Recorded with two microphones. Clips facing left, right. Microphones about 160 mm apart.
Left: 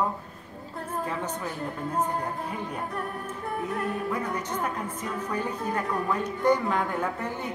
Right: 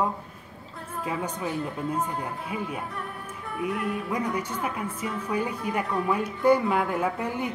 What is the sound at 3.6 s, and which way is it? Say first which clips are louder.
Music: right 3 dB; 40° left (ahead or behind).